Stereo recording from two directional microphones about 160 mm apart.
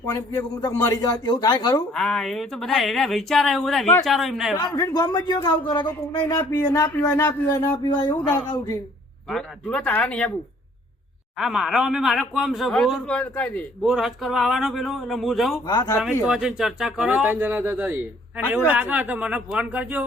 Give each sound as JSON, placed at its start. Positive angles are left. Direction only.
{"t": 0.0, "sound": "speech", "side_deg": 20}
{"t": 2.0, "sound": "speech", "side_deg": 5}
{"t": 4.6, "sound": "speech", "side_deg": 25}
{"t": 6.1, "sound": "speech", "side_deg": 15}
{"t": 9.3, "sound": "speech", "side_deg": 5}
{"t": 11.3, "sound": "speech", "side_deg": 0}
{"t": 15.6, "sound": "speech", "side_deg": 25}
{"t": 16.2, "sound": "speech", "side_deg": -5}